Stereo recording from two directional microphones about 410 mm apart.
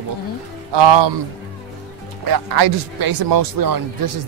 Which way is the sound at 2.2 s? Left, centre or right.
Right.